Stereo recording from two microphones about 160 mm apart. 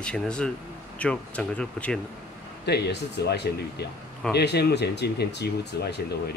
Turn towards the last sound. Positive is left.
turn(degrees=90)